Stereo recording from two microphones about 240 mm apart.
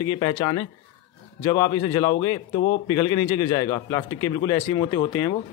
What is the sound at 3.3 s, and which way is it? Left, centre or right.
Speech, centre.